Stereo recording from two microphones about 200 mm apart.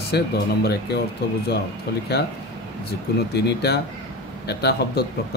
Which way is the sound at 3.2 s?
55° left (ahead or behind).